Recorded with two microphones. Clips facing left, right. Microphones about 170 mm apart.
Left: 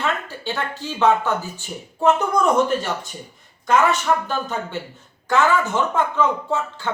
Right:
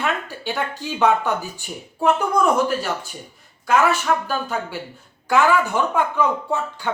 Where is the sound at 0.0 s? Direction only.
15° right (ahead or behind).